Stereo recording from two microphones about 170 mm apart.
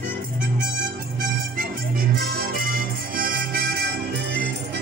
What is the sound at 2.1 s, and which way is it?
Music, 65° right (ahead or behind).